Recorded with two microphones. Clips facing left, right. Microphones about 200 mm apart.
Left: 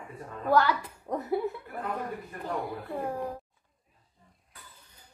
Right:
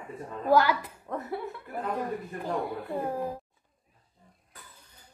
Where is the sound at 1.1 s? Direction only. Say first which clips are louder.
Left 2 dB; 15° left (ahead or behind).